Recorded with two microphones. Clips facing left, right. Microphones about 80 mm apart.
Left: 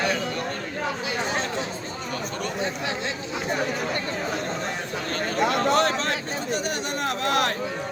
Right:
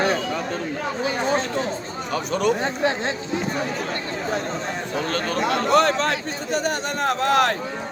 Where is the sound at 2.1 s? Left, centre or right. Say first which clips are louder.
Right 10 dB; right.